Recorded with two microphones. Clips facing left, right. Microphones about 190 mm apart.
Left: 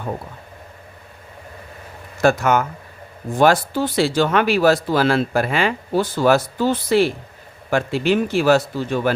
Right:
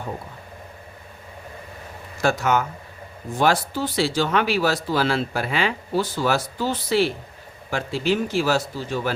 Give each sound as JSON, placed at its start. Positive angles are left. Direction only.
{"t": 2.2, "sound": "speech", "side_deg": 55}